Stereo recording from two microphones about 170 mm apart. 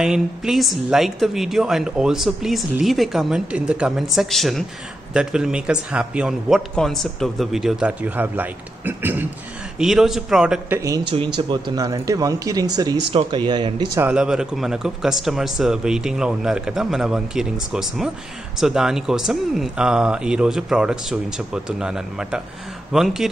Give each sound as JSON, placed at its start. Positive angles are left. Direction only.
{"t": 0.0, "sound": "a man's voice", "side_deg": -5}
{"t": 10.8, "sound": "speech", "side_deg": -20}
{"t": 13.9, "sound": "a man's voice", "side_deg": -10}